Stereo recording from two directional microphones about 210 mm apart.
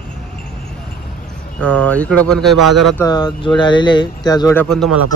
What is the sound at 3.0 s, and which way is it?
Speech, 20° left (ahead or behind).